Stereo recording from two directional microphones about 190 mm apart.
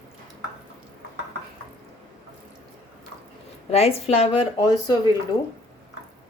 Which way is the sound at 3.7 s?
35° left (ahead or behind).